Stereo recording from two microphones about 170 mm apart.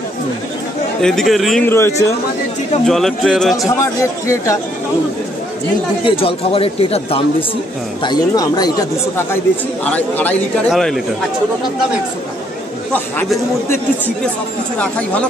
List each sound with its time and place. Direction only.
1.0 s a man's voice: centre (ahead or behind)
1.7 s speech: 15° left (ahead or behind)
2.9 s a man's voice: centre (ahead or behind)
3.5 s speech: 20° left (ahead or behind)
6.0 s a man's voice: 35° left (ahead or behind); by 11.0 s centre (ahead or behind)
12.9 s speech: 10° left (ahead or behind)
14.8 s speech: 5° left (ahead or behind)